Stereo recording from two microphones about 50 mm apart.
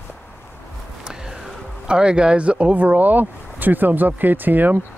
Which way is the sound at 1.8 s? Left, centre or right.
Centre.